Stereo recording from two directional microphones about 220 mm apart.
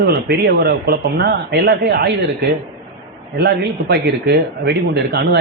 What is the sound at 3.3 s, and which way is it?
A man's voice, 45° right (ahead or behind).